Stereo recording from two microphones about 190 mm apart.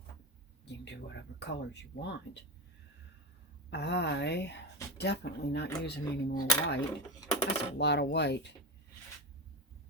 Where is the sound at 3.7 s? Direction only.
60° left (ahead or behind).